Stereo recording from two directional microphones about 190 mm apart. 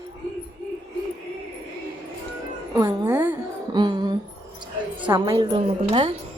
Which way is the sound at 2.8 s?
15° right (ahead or behind).